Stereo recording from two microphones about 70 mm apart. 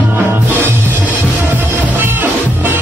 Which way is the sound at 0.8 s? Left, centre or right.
Right.